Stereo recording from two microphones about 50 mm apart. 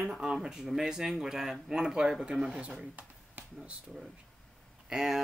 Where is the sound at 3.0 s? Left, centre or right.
Right.